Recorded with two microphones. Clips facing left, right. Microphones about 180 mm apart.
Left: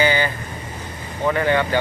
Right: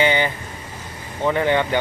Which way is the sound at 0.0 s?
20° right (ahead or behind).